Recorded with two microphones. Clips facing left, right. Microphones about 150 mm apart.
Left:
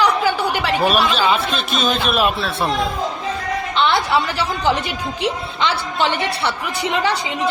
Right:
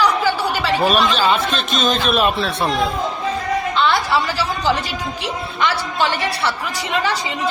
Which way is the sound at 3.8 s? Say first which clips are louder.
Left 2 dB; 20° left (ahead or behind).